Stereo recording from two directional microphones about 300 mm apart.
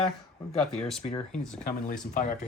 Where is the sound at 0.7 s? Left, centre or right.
Centre.